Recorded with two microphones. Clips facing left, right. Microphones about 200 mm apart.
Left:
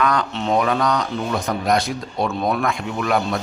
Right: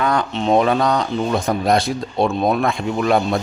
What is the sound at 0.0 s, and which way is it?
A man's voice, 25° right (ahead or behind).